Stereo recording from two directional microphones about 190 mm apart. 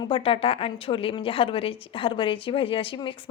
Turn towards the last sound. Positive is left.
turn(degrees=25)  # may be behind; listen again after turning